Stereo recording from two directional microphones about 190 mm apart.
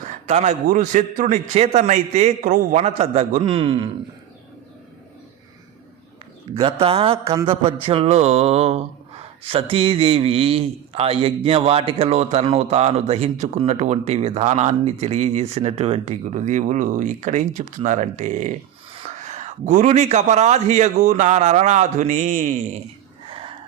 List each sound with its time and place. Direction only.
0.0 s speech: 40° right (ahead or behind)
6.5 s speech: 30° right (ahead or behind)
23.3 s a sound: 25° right (ahead or behind)